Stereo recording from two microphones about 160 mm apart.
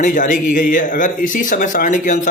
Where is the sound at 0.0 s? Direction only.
50° left (ahead or behind).